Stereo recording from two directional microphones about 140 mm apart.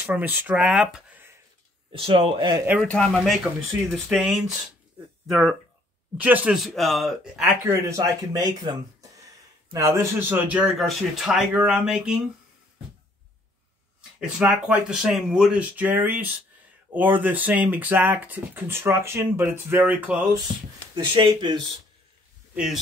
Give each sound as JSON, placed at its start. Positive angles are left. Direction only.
{"t": 0.0, "sound": "speech", "side_deg": -10}
{"t": 1.9, "sound": "speech", "side_deg": -40}
{"t": 2.8, "sound": "a man's voice", "side_deg": 5}
{"t": 7.4, "sound": "speech", "side_deg": -15}
{"t": 8.0, "sound": "a man's voice", "side_deg": -30}
{"t": 14.4, "sound": "speech", "side_deg": -5}
{"t": 20.9, "sound": "speech", "side_deg": -35}
{"t": 22.5, "sound": "speech", "side_deg": -5}